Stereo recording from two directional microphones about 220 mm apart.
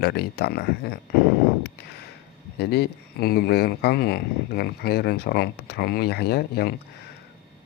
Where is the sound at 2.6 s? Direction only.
45° left (ahead or behind).